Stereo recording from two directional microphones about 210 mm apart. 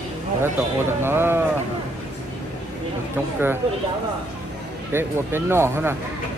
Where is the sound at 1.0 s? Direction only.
10° right (ahead or behind).